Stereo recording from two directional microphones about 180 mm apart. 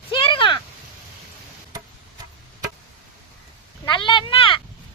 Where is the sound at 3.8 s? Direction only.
25° left (ahead or behind).